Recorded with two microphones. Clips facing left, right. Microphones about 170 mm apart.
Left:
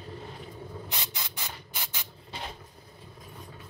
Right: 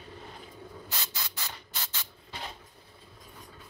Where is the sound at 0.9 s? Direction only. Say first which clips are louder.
Left 1 dB; 20° left (ahead or behind).